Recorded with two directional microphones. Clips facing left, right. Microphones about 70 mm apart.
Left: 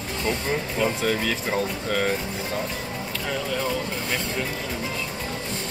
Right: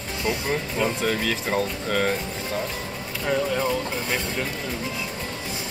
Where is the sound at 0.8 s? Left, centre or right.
Centre.